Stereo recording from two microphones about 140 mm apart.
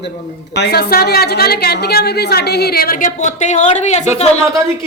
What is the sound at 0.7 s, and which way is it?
A woman's voice, 90° left.